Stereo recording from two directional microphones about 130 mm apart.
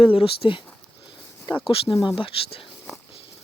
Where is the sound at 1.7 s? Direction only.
45° left (ahead or behind).